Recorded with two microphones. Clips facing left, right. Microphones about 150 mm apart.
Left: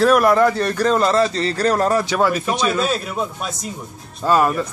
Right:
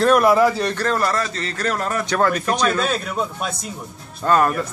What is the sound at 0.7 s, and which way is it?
A man's voice, 20° left (ahead or behind).